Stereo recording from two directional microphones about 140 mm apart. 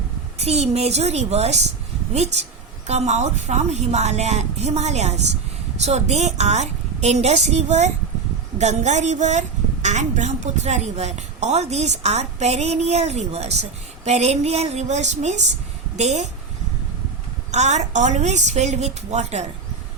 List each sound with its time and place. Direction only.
0.3 s a woman's voice: 50° right (ahead or behind)
17.5 s a woman's voice: 55° right (ahead or behind)